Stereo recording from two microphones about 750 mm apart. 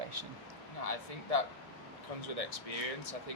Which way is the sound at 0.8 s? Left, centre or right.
Left.